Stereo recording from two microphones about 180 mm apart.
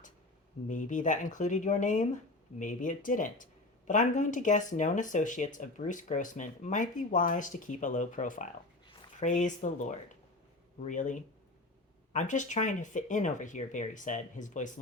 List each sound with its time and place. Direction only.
0.7 s speech: 45° left (ahead or behind)